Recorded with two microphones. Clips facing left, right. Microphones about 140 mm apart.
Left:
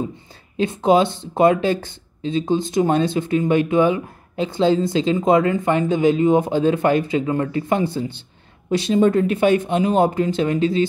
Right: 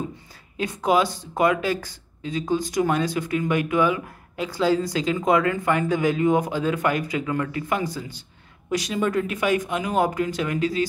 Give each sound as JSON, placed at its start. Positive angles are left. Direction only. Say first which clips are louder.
{"t": 0.6, "sound": "speech", "louder": "left 5 dB", "side_deg": 25}